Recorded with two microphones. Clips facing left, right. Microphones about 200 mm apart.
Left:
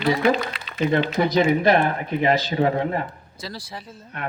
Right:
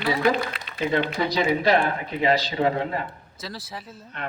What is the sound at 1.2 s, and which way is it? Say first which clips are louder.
Speech: left 5 dB; 50° left (ahead or behind).